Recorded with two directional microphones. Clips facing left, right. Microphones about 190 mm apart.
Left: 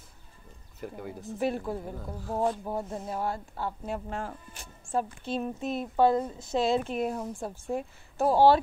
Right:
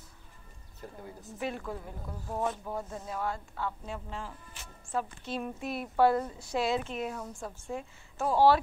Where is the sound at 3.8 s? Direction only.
50° left (ahead or behind).